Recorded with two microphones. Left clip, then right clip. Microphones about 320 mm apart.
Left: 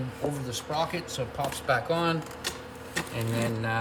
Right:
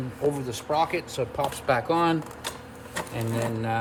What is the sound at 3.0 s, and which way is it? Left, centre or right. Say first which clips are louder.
Speech: right 1 dB; centre.